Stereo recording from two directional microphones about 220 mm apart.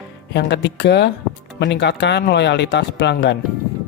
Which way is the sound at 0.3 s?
50° left (ahead or behind).